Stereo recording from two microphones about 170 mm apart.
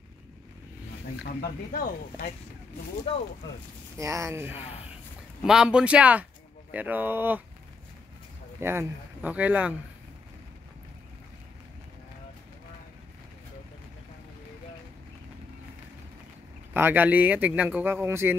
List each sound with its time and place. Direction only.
1.2 s speech: 60° left (ahead or behind)
4.0 s speech: 15° right (ahead or behind)
8.5 s speech: 15° right (ahead or behind)
16.7 s speech: 10° right (ahead or behind)